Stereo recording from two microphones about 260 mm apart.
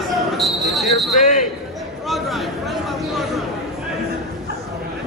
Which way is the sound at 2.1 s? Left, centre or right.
Centre.